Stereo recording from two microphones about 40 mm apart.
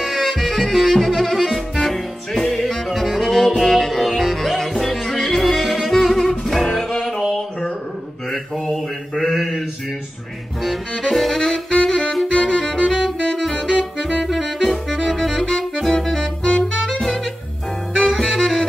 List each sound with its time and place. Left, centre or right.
0.0 s music: centre
8.3 s mantra: centre
10.6 s saxophone: centre
12.4 s music: centre
12.7 s music: centre
13.5 s saxophone: centre
14.2 s saxophone: centre
18.3 s saxophone: centre